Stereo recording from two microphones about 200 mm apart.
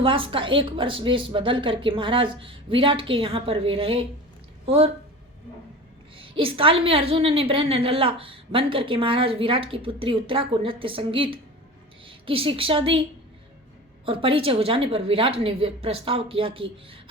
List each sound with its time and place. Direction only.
0.0 s a woman's voice: 25° right (ahead or behind)
6.1 s a woman's voice: 25° right (ahead or behind)